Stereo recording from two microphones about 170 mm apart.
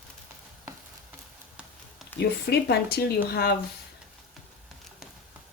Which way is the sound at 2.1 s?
75° left (ahead or behind).